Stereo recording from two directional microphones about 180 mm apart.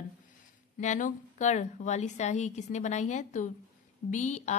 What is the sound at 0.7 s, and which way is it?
A woman's voice, 45° left (ahead or behind).